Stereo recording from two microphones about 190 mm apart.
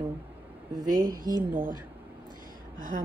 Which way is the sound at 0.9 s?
45° right (ahead or behind).